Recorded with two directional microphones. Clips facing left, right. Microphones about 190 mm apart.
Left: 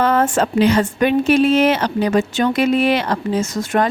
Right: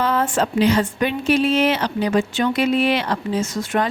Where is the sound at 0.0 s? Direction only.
50° left (ahead or behind).